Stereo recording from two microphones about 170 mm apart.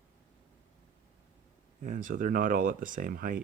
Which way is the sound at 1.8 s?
50° right (ahead or behind).